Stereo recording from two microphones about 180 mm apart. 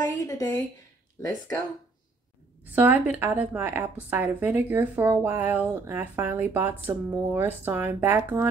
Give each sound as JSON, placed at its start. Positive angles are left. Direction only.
{"t": 0.0, "sound": "a woman's voice", "side_deg": 20}
{"t": 2.6, "sound": "speech", "side_deg": -10}